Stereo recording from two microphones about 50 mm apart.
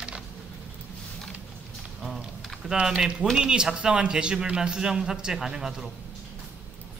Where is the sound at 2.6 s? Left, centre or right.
Centre.